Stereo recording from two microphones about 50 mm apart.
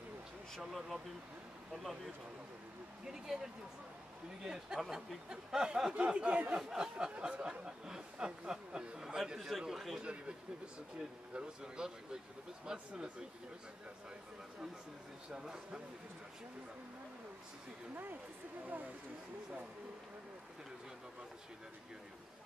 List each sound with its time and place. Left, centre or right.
0.7 s speech: centre
11.3 s speech: centre
15.2 s speech: centre